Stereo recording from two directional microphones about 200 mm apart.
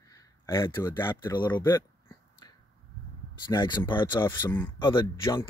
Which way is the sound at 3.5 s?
20° left (ahead or behind).